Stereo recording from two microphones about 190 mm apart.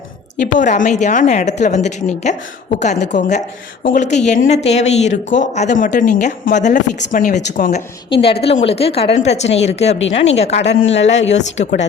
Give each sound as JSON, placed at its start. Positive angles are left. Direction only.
{"t": 0.6, "sound": "a woman's voice", "side_deg": 40}
{"t": 8.1, "sound": "a woman's voice", "side_deg": 30}
{"t": 10.6, "sound": "a man's voice", "side_deg": 75}
{"t": 11.3, "sound": "a woman's voice", "side_deg": 35}